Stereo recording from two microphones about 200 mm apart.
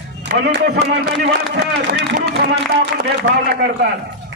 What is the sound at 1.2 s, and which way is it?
Speech, 60° right (ahead or behind).